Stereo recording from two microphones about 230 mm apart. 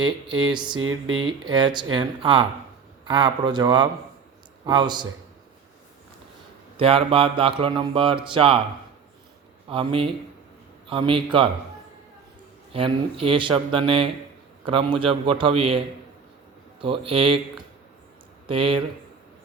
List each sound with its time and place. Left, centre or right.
0.0 s speech: centre
0.8 s speech: right
1.5 s speech: centre
6.7 s speech: right
9.6 s speech: right
12.7 s speech: right
16.8 s speech: right
18.4 s speech: right